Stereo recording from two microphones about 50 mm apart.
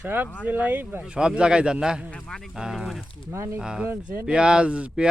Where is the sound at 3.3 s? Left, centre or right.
Right.